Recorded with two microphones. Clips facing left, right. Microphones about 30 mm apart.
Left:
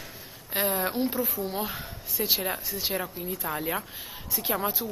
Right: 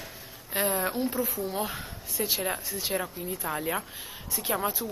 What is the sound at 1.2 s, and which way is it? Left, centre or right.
Speech, left.